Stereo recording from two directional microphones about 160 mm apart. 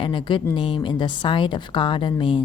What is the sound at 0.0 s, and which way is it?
Speech, 30° left (ahead or behind).